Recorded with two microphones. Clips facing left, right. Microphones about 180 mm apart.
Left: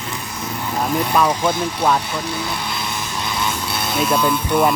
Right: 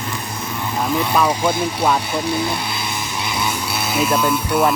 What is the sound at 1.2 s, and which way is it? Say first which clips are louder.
Speech: even; 10° right (ahead or behind).